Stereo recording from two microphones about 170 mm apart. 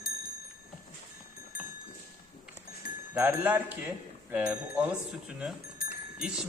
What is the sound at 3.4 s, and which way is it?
Speech, 10° right (ahead or behind).